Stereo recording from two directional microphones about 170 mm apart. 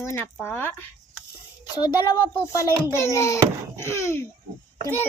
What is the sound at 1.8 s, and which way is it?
A child's voice, 25° left (ahead or behind).